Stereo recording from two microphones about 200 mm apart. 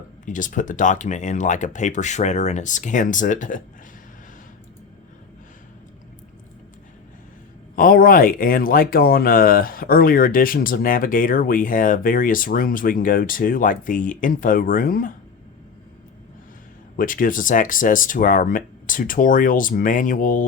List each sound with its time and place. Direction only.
0.3 s speech: 40° left (ahead or behind)
7.8 s speech: 45° left (ahead or behind)
17.0 s speech: 45° left (ahead or behind)